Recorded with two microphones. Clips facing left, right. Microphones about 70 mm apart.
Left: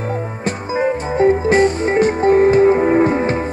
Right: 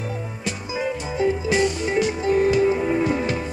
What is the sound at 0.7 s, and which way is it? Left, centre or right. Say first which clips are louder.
Music: left 8 dB; left.